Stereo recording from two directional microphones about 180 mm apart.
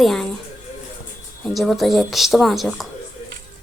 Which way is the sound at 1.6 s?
Centre (ahead or behind).